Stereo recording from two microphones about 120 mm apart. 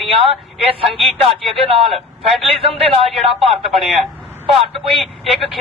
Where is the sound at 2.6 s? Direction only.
50° right (ahead or behind).